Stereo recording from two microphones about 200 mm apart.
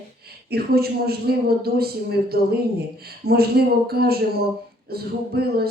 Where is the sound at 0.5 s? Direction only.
50° right (ahead or behind).